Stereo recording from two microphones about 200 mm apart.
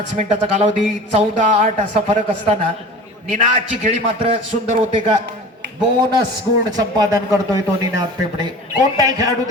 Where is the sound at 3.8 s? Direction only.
30° right (ahead or behind).